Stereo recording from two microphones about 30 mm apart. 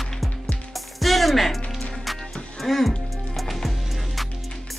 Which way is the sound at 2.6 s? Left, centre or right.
Centre.